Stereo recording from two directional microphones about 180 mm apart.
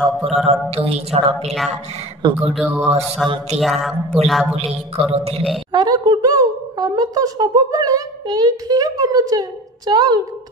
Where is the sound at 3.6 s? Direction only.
Centre (ahead or behind).